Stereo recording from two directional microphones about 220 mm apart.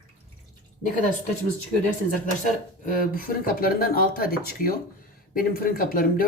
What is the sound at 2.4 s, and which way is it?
Speech, 40° left (ahead or behind).